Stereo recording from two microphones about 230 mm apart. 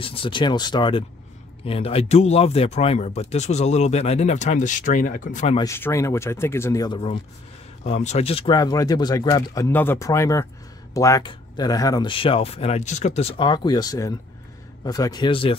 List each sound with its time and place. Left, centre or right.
0.0 s speech: left
5.6 s speech: centre